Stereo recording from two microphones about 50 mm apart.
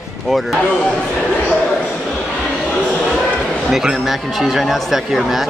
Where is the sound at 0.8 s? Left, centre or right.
Left.